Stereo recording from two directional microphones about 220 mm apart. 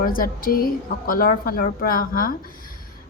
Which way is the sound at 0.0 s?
40° left (ahead or behind).